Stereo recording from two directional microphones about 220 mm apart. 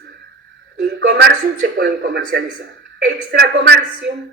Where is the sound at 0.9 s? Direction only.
50° right (ahead or behind).